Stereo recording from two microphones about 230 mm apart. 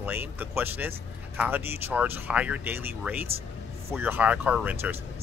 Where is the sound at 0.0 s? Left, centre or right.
Centre.